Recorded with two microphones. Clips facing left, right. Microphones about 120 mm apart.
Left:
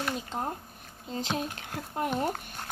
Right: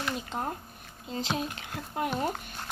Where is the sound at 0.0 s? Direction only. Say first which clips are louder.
Even; 35° left (ahead or behind).